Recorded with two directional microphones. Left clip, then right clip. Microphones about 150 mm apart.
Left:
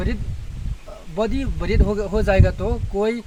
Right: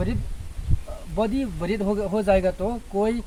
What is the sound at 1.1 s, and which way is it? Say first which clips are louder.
Speech: left 1 dB; centre (ahead or behind).